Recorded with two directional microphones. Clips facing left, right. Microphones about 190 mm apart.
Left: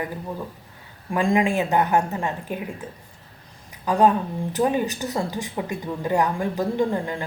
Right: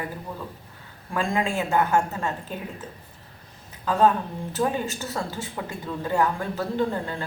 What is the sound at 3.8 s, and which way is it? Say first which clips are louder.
Speech: left 2 dB; 15° left (ahead or behind).